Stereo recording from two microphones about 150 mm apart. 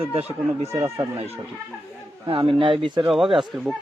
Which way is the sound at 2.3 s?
35° right (ahead or behind).